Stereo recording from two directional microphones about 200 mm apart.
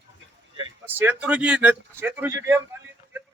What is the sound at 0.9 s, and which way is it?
A man's voice, 5° right (ahead or behind).